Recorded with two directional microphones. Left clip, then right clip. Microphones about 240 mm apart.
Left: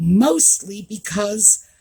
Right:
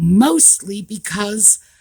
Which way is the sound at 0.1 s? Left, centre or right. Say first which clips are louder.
Right 2 dB; right.